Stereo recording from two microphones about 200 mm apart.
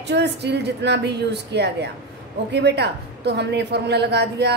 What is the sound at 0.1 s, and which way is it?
A woman's voice, 60° right (ahead or behind).